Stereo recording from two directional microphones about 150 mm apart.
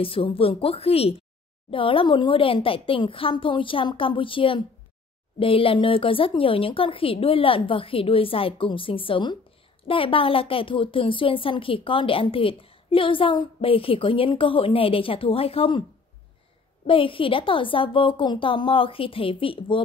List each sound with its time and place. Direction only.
0.0 s a woman's voice: 35° left (ahead or behind)
16.8 s a woman's voice: 35° left (ahead or behind)